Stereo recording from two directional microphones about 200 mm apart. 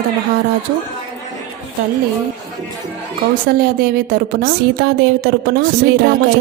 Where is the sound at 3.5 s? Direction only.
50° right (ahead or behind).